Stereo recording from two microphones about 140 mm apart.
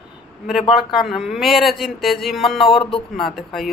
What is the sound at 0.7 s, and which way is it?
Speech, centre (ahead or behind).